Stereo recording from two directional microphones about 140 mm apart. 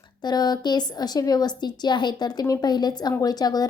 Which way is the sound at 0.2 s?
30° left (ahead or behind).